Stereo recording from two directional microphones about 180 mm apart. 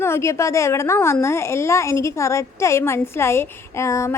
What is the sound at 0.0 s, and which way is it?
A woman's voice, 15° left (ahead or behind).